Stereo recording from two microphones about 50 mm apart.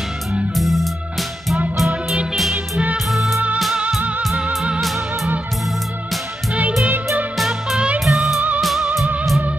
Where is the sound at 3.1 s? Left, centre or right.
Centre.